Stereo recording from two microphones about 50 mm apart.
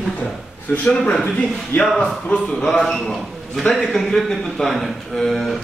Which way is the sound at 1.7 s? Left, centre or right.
Left.